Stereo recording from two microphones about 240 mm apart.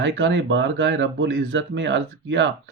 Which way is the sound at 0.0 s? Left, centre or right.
Right.